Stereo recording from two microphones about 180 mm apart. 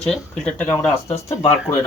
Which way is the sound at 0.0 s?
5° left (ahead or behind).